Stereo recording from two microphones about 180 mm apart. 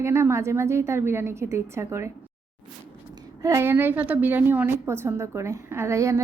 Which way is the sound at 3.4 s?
15° right (ahead or behind).